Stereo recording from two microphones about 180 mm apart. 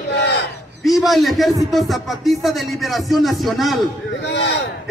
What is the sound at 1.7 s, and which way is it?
Music, centre (ahead or behind).